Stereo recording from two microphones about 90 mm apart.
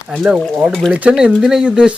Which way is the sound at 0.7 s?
5° left (ahead or behind).